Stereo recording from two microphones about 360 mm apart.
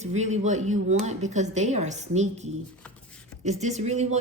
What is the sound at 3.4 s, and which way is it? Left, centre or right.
Speech, centre.